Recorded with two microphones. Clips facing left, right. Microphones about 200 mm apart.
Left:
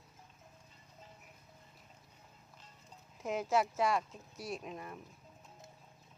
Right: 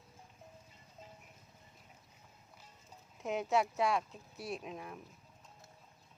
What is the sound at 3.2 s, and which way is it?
Speech, centre (ahead or behind).